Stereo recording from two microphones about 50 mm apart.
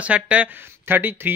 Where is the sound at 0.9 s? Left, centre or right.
Right.